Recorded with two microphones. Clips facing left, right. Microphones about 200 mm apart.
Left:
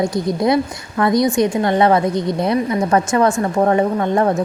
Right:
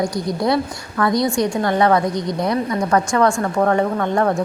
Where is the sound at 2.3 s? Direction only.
25° left (ahead or behind).